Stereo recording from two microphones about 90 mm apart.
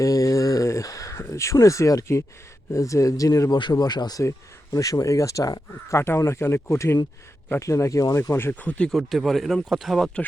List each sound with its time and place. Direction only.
0.0 s a sound: 40° left (ahead or behind)
1.2 s speech: 35° left (ahead or behind)
3.6 s speech: 50° left (ahead or behind)
4.2 s speech: 35° left (ahead or behind); by 8.9 s 15° left (ahead or behind)
8.9 s speech: centre (ahead or behind)